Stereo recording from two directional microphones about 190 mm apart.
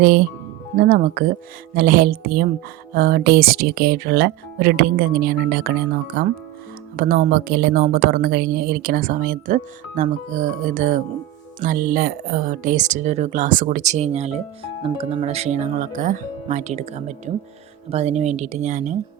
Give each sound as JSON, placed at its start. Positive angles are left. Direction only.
{"t": 0.0, "sound": "a woman's voice", "side_deg": -55}